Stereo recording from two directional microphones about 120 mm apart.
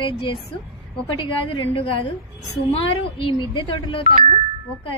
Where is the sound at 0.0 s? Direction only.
45° left (ahead or behind).